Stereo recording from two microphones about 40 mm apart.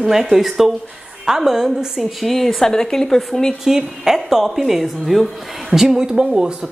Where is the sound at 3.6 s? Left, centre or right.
Centre.